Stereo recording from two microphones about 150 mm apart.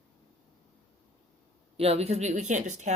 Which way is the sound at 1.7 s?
40° right (ahead or behind).